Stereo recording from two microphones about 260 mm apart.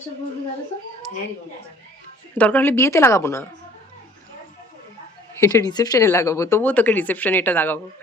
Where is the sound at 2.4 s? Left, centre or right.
Centre.